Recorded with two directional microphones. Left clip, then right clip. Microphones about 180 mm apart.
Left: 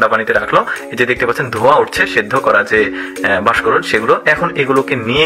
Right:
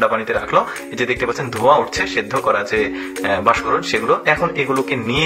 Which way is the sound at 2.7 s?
20° left (ahead or behind).